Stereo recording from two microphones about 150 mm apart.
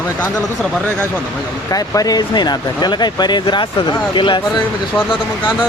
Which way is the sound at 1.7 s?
25° left (ahead or behind).